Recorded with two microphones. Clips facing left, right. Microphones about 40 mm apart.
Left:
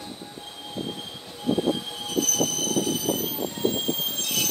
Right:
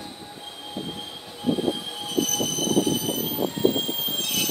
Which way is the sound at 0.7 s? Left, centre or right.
Centre.